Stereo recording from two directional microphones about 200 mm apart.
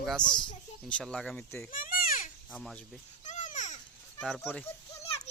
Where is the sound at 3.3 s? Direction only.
35° left (ahead or behind).